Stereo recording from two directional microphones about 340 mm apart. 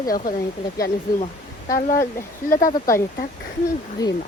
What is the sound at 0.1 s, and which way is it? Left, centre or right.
Speech, left.